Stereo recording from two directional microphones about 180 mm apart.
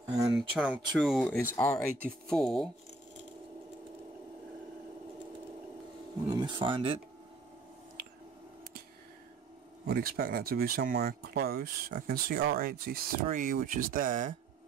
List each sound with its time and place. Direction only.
0.4 s speech: centre (ahead or behind)
6.3 s speech: 25° right (ahead or behind)
9.8 s speech: 55° right (ahead or behind)